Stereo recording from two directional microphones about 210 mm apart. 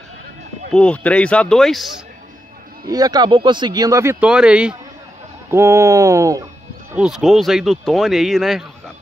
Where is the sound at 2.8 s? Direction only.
15° right (ahead or behind).